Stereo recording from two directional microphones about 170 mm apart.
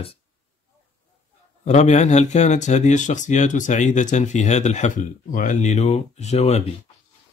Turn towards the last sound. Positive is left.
turn(degrees=40)  # may be behind; listen again after turning